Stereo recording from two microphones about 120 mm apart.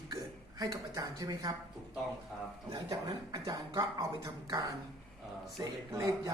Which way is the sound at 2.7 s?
30° right (ahead or behind).